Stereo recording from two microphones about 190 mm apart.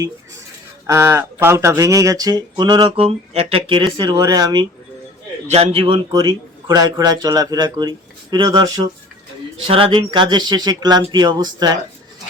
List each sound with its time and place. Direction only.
0.9 s speech: 15° right (ahead or behind)
5.5 s speech: 30° right (ahead or behind)